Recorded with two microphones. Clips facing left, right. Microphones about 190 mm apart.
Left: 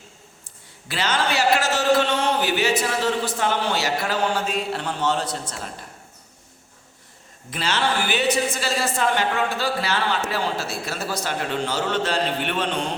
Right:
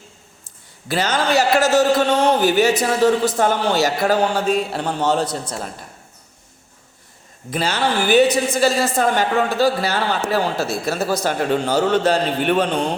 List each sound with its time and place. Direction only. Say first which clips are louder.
0.4 s a man's voice: right 11 dB; 40° right (ahead or behind)
7.5 s a woman's voice: right 4 dB; 35° right (ahead or behind)